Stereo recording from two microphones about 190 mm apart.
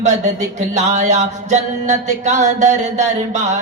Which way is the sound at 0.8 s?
40° right (ahead or behind).